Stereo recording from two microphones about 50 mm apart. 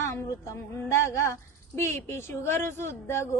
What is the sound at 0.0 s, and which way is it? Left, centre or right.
A woman's voice, left.